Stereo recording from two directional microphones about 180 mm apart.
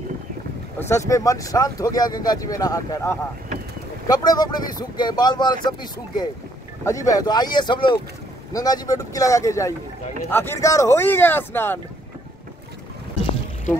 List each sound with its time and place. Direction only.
0.7 s speech: 15° left (ahead or behind)